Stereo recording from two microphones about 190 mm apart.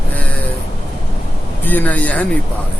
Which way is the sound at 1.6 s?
10° left (ahead or behind).